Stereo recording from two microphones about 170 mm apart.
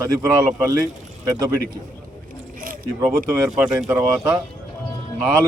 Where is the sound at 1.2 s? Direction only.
20° right (ahead or behind).